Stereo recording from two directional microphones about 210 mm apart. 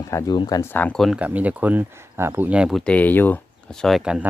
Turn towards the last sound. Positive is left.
turn(degrees=0)  # may be behind; listen again after turning